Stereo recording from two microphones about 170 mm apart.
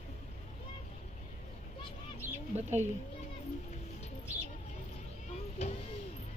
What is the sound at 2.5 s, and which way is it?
Speech, 40° right (ahead or behind).